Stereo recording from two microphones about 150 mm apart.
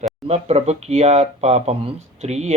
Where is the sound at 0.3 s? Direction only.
45° right (ahead or behind).